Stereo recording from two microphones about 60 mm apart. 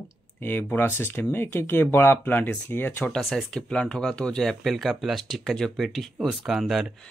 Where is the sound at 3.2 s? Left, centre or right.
Centre.